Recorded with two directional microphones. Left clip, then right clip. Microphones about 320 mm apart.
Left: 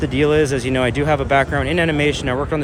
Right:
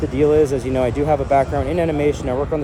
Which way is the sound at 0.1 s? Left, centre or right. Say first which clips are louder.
Right 1 dB; left.